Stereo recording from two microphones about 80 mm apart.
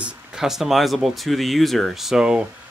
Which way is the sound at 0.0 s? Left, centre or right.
Centre.